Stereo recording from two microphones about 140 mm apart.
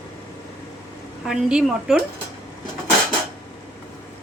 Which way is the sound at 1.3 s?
5° right (ahead or behind).